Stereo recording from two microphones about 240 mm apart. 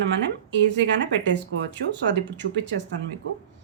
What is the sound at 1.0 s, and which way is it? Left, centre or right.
Speech, right.